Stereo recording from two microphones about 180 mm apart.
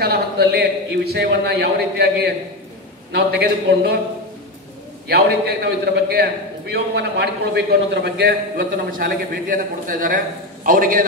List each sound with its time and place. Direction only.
0.0 s a man's voice: 60° right (ahead or behind)
5.0 s a man's voice: 65° right (ahead or behind)